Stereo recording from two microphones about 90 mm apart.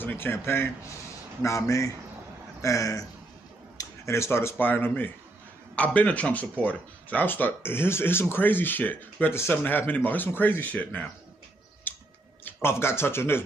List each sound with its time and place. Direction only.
0.0 s speech: 25° left (ahead or behind)
11.9 s a sound: 20° left (ahead or behind)
12.4 s speech: 25° left (ahead or behind)